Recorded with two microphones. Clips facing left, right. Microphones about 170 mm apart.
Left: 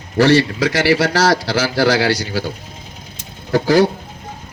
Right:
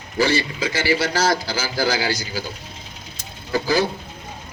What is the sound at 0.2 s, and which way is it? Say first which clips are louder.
A man's voice: left 8 dB; 75° left (ahead or behind).